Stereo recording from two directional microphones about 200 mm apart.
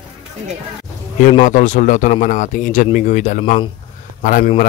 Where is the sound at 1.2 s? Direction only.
35° left (ahead or behind).